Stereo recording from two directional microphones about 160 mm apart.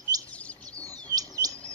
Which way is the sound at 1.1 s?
20° right (ahead or behind).